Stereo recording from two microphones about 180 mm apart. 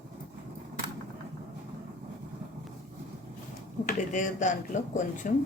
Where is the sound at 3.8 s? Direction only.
45° left (ahead or behind).